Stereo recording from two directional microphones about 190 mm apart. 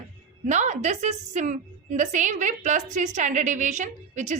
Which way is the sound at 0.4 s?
40° right (ahead or behind).